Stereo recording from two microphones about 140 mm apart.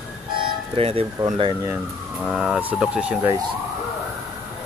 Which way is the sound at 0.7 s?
45° right (ahead or behind).